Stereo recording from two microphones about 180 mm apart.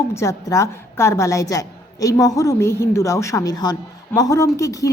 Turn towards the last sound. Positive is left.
turn(degrees=20)  # may be behind; listen again after turning